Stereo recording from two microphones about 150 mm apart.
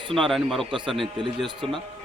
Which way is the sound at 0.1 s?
Centre (ahead or behind).